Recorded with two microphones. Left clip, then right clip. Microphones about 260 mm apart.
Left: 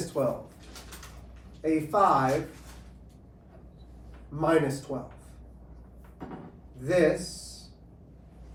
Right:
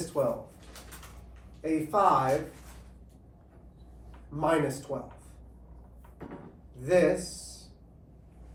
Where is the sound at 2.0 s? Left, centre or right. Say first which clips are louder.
Left 1 dB; centre.